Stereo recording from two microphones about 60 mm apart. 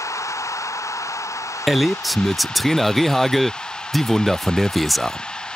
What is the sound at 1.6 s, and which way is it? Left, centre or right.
Speech, centre.